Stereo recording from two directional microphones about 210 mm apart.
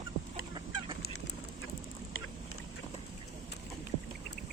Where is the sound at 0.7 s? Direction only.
65° left (ahead or behind).